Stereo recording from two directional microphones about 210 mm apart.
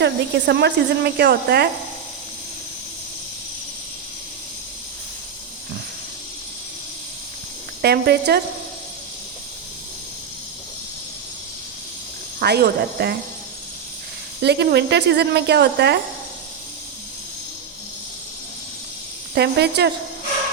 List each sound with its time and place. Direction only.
0.0 s speech: 55° right (ahead or behind)
7.8 s speech: 50° right (ahead or behind)
12.4 s speech: 50° right (ahead or behind)
14.4 s speech: 50° right (ahead or behind)
19.3 s speech: 50° right (ahead or behind)